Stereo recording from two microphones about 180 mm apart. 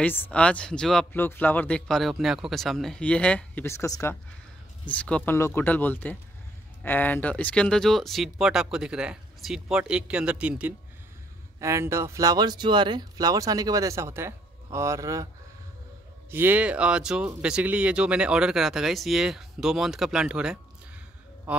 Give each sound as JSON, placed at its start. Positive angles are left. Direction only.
{"t": 0.0, "sound": "speech", "side_deg": 10}
{"t": 16.3, "sound": "speech", "side_deg": -10}